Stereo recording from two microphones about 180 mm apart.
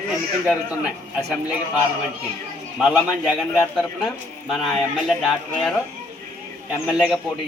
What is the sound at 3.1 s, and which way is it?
Speech, 5° right (ahead or behind).